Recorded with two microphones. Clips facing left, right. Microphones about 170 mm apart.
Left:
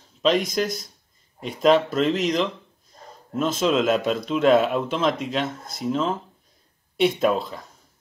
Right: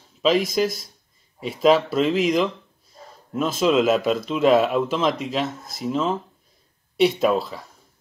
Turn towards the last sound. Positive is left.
turn(degrees=0)  # may be behind; listen again after turning